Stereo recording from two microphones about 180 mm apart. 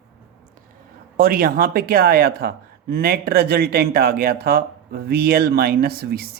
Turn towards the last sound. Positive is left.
turn(degrees=-60)  # may be behind; listen again after turning